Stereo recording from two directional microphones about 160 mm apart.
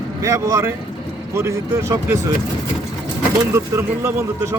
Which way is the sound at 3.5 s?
15° right (ahead or behind).